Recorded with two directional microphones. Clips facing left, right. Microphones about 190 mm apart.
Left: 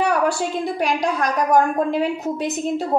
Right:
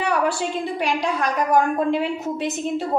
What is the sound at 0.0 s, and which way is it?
A woman's voice, 45° left (ahead or behind).